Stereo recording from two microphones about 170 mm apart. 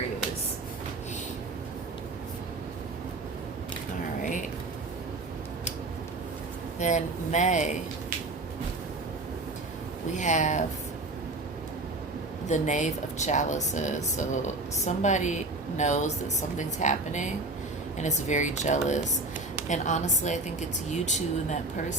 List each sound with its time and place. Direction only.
4.2 s a sound: 50° left (ahead or behind)
6.7 s speech: 45° left (ahead or behind)
10.2 s speech: 45° left (ahead or behind)
12.5 s speech: 45° left (ahead or behind)